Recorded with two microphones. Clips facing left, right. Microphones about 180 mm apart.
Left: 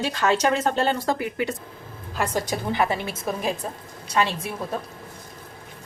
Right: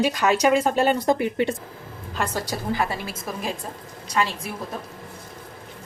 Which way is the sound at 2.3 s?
20° left (ahead or behind).